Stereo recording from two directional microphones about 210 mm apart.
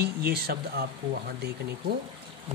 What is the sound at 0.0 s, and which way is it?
Speech, 50° right (ahead or behind).